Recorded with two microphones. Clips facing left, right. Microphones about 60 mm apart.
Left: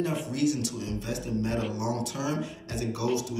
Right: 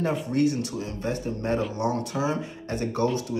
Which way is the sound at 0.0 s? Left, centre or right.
Right.